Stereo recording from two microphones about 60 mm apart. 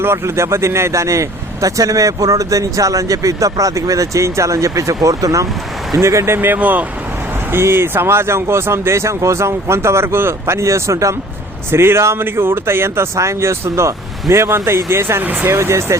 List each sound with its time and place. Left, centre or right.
0.0 s speech: right
6.0 s speech: right
7.5 s speech: right
11.7 s speech: right
15.2 s speech: right
15.4 s speech: right